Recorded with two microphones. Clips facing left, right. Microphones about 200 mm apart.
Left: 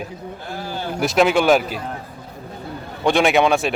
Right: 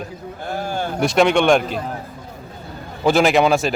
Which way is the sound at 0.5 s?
50° right (ahead or behind).